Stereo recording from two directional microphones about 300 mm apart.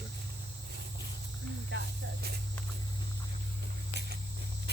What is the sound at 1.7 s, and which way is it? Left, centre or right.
Speech, right.